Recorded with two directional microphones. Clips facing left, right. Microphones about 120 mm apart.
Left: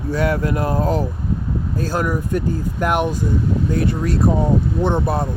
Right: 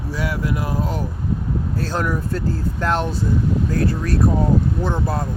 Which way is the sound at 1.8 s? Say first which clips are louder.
Left 3 dB; 10° left (ahead or behind).